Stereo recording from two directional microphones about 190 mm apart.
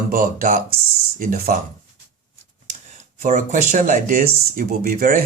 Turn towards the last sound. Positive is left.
turn(degrees=-50)  # may be behind; listen again after turning